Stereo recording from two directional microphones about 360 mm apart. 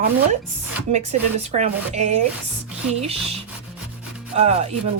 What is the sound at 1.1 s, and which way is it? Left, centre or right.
Speech, centre.